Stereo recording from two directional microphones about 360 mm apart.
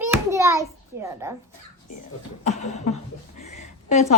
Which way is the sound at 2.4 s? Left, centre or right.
Centre.